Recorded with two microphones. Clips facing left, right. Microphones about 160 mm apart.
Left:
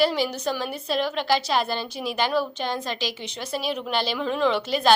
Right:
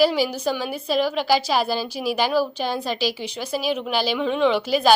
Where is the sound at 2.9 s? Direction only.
25° left (ahead or behind).